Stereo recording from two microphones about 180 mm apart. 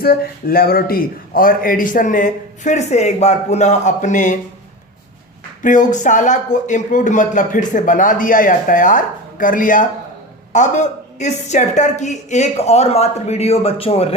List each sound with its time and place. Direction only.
0.0 s a man's voice: 55° left (ahead or behind)
5.6 s a man's voice: 45° left (ahead or behind)